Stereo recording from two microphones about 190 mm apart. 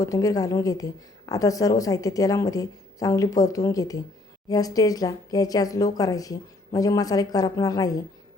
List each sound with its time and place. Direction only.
0.0 s a woman's voice: 20° left (ahead or behind)